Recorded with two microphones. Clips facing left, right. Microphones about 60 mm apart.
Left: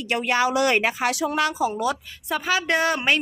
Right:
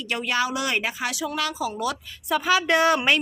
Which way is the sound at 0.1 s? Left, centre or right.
Left.